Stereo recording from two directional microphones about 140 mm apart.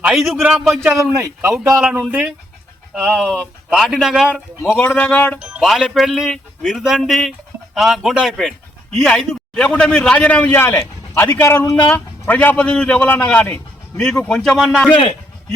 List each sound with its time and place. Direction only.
0.0 s speech: centre (ahead or behind)
1.1 s speech: 20° right (ahead or behind)
1.5 s speech: 5° right (ahead or behind)
4.4 s speech: 10° left (ahead or behind)
5.4 s speech: 5° right (ahead or behind)